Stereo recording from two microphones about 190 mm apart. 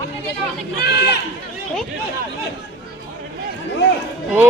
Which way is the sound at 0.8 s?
60° left (ahead or behind).